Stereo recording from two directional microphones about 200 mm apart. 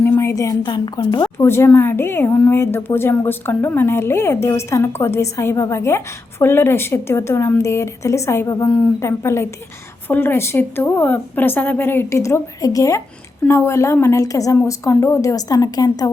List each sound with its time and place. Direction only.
0.0 s a woman's voice: 10° left (ahead or behind)